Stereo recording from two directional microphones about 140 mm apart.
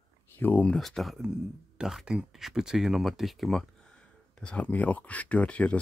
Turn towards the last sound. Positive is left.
turn(degrees=10)  # may be behind; listen again after turning